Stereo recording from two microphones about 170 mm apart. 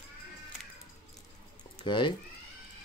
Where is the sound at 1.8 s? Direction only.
30° left (ahead or behind).